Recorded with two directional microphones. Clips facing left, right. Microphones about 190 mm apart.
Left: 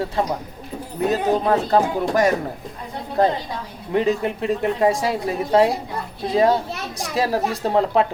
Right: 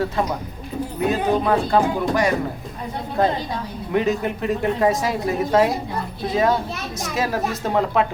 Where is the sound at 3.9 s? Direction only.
30° left (ahead or behind).